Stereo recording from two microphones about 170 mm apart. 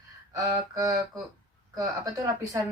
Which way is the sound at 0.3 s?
20° right (ahead or behind).